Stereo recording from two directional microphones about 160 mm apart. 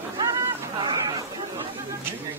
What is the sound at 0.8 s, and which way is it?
Chatter, 25° right (ahead or behind).